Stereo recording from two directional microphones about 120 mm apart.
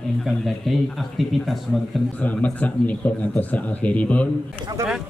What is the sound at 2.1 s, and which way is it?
Speech, 10° left (ahead or behind).